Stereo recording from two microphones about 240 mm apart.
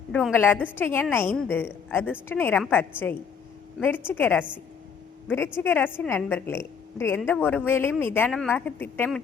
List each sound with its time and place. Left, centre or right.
0.1 s a woman's voice: centre
5.5 s a woman's voice: centre